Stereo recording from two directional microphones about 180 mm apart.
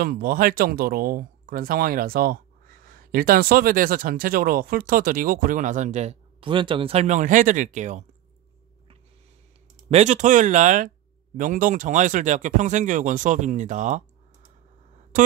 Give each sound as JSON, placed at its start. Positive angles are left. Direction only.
{"t": 0.0, "sound": "speech", "side_deg": -55}
{"t": 9.8, "sound": "speech", "side_deg": -40}